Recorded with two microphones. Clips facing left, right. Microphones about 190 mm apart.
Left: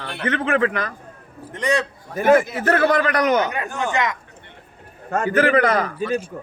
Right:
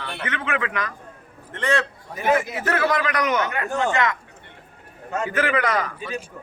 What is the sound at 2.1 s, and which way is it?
Speech, 50° left (ahead or behind).